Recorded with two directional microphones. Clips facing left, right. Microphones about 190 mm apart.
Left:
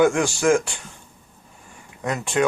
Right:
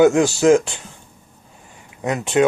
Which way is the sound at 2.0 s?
20° right (ahead or behind).